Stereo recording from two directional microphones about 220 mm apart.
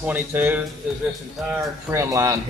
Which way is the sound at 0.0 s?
10° right (ahead or behind).